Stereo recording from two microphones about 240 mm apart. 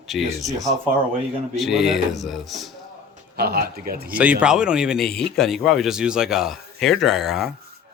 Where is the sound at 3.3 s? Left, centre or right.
Right.